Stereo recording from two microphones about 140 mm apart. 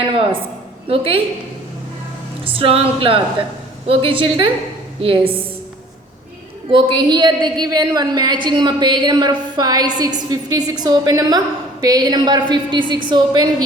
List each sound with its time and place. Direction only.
0.1 s a sound: 40° right (ahead or behind)
0.9 s a woman's voice: 40° right (ahead or behind)
2.4 s a woman's voice: 40° right (ahead or behind)
6.7 s a woman's voice: 35° right (ahead or behind)